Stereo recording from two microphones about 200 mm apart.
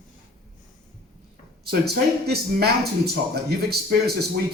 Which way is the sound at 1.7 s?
55° right (ahead or behind).